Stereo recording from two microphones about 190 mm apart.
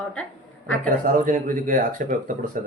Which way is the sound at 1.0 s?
45° right (ahead or behind).